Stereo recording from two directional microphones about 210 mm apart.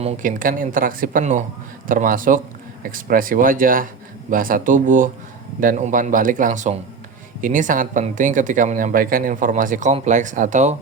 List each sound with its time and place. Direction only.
0.0 s speech: 40° right (ahead or behind)